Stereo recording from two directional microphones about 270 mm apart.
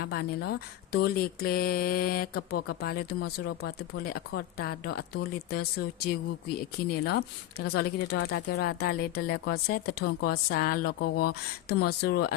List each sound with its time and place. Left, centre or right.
0.0 s speech: left